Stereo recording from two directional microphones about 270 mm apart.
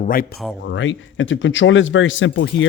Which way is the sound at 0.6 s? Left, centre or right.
Left.